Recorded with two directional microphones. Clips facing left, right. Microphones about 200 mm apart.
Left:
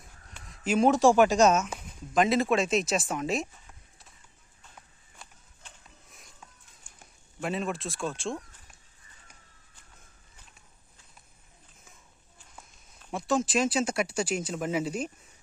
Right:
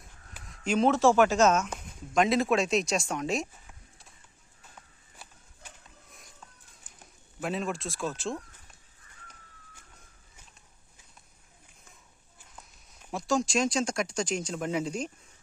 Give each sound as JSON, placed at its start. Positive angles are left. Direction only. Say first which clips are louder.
{"t": 0.0, "sound": "a sound", "louder": "even", "side_deg": 0}
{"t": 1.6, "sound": "speech", "louder": "even", "side_deg": 0}
{"t": 5.1, "sound": "a sound", "louder": "even", "side_deg": -5}
{"t": 7.0, "sound": "speech", "louder": "left 1 dB", "side_deg": 0}
{"t": 12.5, "sound": "walk", "louder": "even", "side_deg": 0}
{"t": 13.1, "sound": "speech", "louder": "left 1 dB", "side_deg": 0}